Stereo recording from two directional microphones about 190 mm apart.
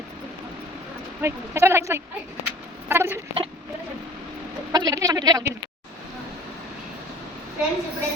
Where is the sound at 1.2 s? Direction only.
15° right (ahead or behind).